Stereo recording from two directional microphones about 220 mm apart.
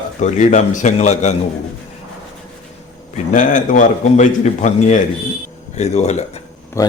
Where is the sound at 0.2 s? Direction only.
35° left (ahead or behind).